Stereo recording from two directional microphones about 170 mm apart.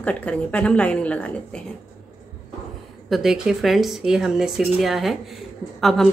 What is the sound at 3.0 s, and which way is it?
A woman's voice, centre (ahead or behind).